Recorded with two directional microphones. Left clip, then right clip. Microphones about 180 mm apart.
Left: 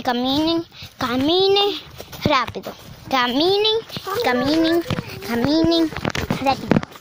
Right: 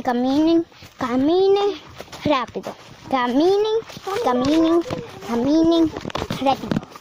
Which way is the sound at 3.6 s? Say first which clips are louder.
Left 2 dB; 5° right (ahead or behind).